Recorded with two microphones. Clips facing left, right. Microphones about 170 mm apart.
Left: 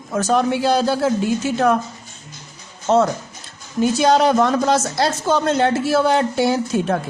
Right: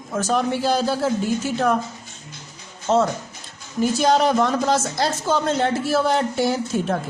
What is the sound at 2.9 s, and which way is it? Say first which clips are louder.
A woman's voice: left 3 dB; 65° left (ahead or behind).